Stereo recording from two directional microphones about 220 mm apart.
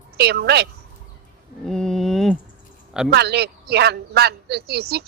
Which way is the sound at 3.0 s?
50° right (ahead or behind).